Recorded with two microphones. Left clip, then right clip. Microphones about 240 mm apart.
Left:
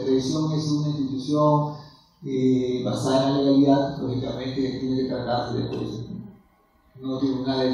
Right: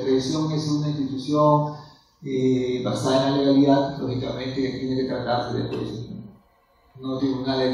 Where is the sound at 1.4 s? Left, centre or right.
Left.